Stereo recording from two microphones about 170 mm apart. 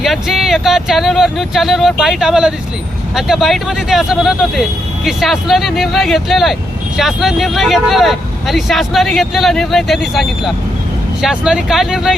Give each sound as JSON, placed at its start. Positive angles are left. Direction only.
{"t": 0.0, "sound": "speech", "side_deg": 0}